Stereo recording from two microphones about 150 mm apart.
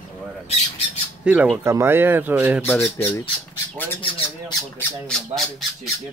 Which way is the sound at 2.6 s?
15° left (ahead or behind).